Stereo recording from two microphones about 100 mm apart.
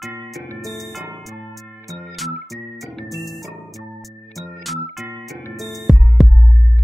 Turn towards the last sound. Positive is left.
turn(degrees=0)  # may be behind; listen again after turning